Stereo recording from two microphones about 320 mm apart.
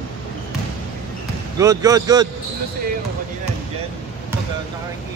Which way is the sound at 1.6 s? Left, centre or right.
Centre.